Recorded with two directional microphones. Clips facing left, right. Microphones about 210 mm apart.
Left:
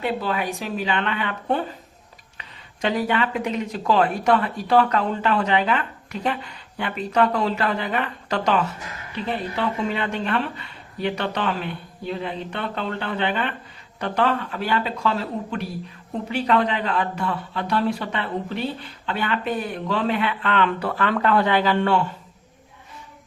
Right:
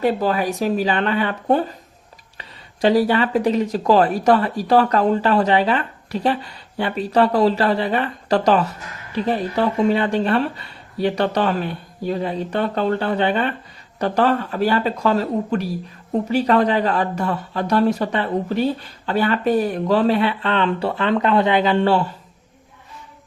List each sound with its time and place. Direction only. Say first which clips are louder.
0.0 s speech: right 6 dB; 40° right (ahead or behind)